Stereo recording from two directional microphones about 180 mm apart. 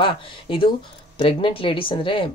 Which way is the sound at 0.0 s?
30° left (ahead or behind).